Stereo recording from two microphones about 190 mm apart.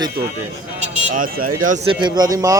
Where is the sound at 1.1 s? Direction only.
45° right (ahead or behind).